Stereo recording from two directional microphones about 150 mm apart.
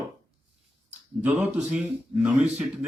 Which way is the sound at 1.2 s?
10° right (ahead or behind).